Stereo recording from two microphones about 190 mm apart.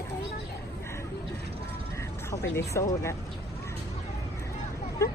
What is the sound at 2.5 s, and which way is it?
Speech, 15° left (ahead or behind).